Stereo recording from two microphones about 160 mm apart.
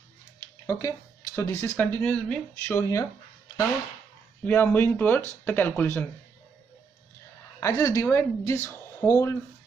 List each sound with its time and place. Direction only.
0.7 s speech: 20° left (ahead or behind)
2.7 s speech: 20° left (ahead or behind)
4.5 s speech: 15° left (ahead or behind)
7.6 s speech: 20° left (ahead or behind)